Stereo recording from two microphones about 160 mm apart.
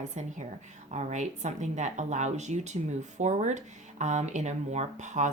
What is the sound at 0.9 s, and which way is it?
Speech, 45° right (ahead or behind).